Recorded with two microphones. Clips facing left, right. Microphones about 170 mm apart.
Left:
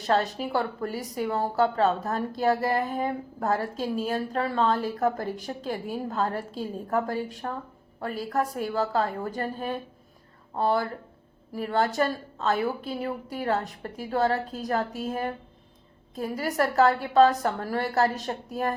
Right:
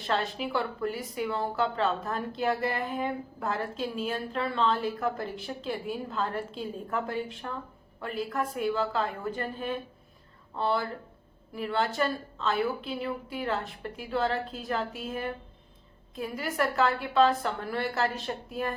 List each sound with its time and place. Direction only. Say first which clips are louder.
0.0 s a woman's voice: left 5 dB; 40° left (ahead or behind)